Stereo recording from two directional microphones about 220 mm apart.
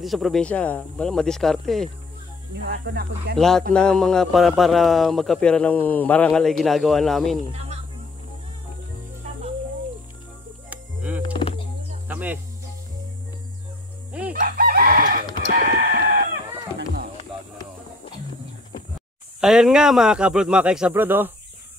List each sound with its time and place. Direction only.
0.0 s a man's voice: centre (ahead or behind)
2.5 s speech: 50° right (ahead or behind)
3.3 s a man's voice: centre (ahead or behind)
7.5 s hum: 30° right (ahead or behind)
10.7 s music: 5° right (ahead or behind)
11.3 s a sound: 25° left (ahead or behind)
12.1 s music: 5° right (ahead or behind)
14.3 s chicken: 40° right (ahead or behind)
16.7 s a sound: 45° right (ahead or behind)
17.2 s music: 25° left (ahead or behind)
19.4 s a man's voice: centre (ahead or behind)